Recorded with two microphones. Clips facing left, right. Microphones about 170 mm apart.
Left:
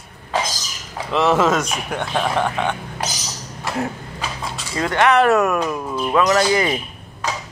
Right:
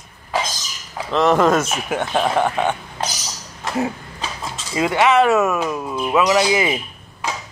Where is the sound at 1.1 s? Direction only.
5° left (ahead or behind); by 2.7 s 10° right (ahead or behind).